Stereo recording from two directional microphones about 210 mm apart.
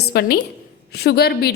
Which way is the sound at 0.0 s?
50° left (ahead or behind).